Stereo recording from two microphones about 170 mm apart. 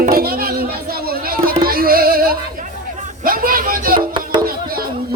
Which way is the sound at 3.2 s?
55° right (ahead or behind).